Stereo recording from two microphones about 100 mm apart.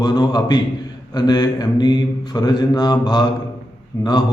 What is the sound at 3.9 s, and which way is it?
Speech, 35° left (ahead or behind).